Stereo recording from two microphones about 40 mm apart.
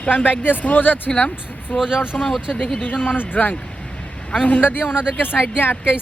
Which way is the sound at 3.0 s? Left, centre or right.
Left.